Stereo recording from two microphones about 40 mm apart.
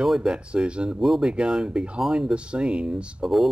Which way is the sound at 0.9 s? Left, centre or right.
Centre.